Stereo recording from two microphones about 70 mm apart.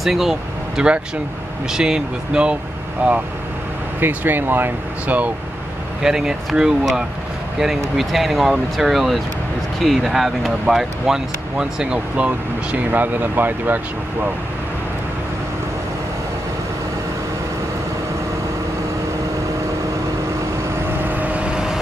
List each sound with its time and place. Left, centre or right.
0.0 s speech: centre; by 5.3 s right
6.0 s speech: centre
12.7 s speech: right
21.0 s vehicle: right